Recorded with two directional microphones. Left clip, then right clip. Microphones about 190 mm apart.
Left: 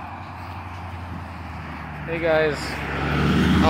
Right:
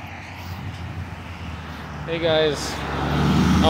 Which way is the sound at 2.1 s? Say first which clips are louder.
Right 1 dB; 35° right (ahead or behind).